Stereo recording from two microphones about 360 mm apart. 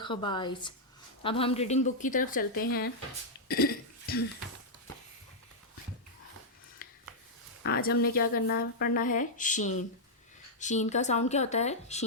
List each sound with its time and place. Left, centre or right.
0.0 s a woman's voice: centre
3.5 s cough: left
7.6 s speech: left